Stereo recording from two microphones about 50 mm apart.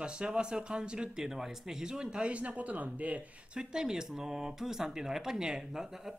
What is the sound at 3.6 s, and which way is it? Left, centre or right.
Speech, centre.